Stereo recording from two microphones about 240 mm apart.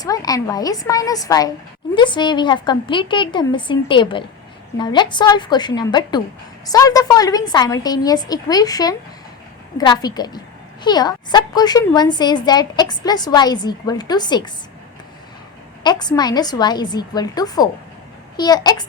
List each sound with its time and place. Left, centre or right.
0.0 s a woman's voice: centre
15.8 s a woman's voice: centre